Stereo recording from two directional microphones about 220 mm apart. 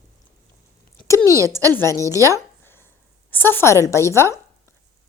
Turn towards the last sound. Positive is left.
turn(degrees=15)  # may be behind; listen again after turning